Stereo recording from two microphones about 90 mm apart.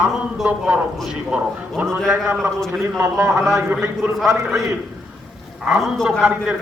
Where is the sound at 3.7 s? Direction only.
20° right (ahead or behind).